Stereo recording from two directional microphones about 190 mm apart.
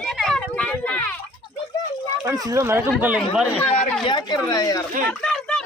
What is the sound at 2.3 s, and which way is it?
Speech, 15° right (ahead or behind).